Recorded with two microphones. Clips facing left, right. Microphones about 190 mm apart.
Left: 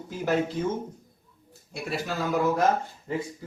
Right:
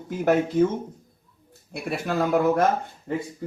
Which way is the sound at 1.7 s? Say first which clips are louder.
Right 4 dB; 55° right (ahead or behind).